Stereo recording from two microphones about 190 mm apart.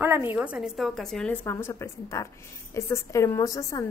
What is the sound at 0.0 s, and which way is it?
A woman's voice, 10° right (ahead or behind).